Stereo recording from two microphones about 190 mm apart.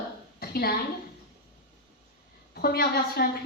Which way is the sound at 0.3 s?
55° left (ahead or behind).